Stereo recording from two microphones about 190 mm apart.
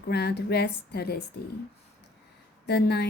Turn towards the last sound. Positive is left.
turn(degrees=55)  # may be behind; listen again after turning